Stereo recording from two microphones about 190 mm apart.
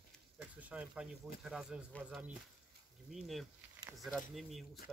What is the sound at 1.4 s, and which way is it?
Speech, 5° right (ahead or behind).